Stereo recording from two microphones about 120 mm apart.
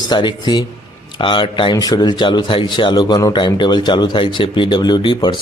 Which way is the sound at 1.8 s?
35° left (ahead or behind).